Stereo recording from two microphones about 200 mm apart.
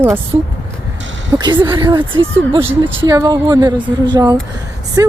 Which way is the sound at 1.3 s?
20° right (ahead or behind).